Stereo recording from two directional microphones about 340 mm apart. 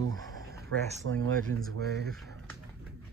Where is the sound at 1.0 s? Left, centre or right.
Right.